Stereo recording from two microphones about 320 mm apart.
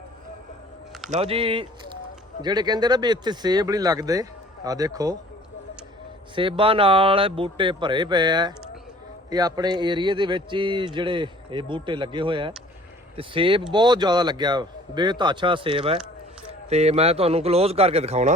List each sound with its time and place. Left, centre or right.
1.1 s speech: centre
6.3 s speech: centre